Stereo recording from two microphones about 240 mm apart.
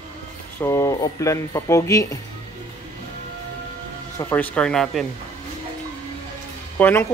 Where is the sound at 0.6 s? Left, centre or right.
Centre.